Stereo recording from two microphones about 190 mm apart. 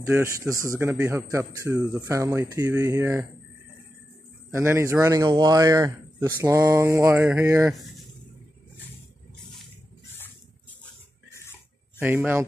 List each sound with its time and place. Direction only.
0.1 s a man's voice: 15° right (ahead or behind)
4.5 s a man's voice: 15° right (ahead or behind)
11.2 s a sound: 15° left (ahead or behind)
12.0 s a man's voice: 10° right (ahead or behind)